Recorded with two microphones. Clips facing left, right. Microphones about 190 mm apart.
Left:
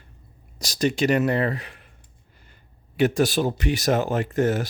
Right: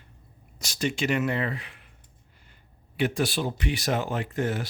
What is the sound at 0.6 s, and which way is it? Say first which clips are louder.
Speech: left 6 dB; 40° left (ahead or behind).